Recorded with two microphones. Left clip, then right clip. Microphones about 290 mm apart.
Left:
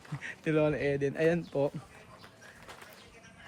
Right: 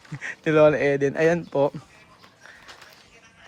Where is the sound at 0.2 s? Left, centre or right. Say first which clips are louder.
Right 12 dB; centre.